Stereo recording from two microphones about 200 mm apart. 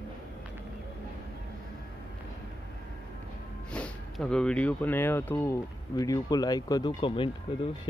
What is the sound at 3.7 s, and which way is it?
Speech, 5° left (ahead or behind).